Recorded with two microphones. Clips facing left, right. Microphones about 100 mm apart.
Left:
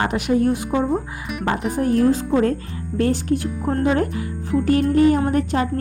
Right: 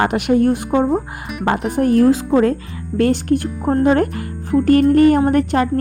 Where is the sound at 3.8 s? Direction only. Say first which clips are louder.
Right 5 dB; 55° right (ahead or behind).